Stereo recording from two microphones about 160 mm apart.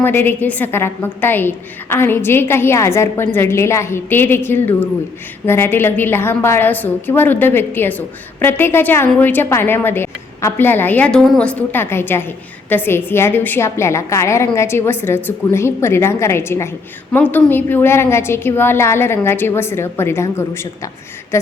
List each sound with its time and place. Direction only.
0.0 s a woman's voice: 15° left (ahead or behind)